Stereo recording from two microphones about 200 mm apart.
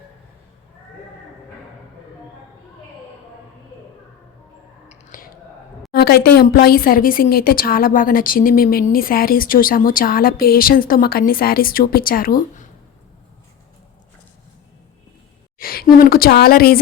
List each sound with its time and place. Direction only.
4.9 s a sound: 45° left (ahead or behind)
5.9 s a woman's voice: 50° left (ahead or behind)
15.5 s a woman's voice: 45° left (ahead or behind)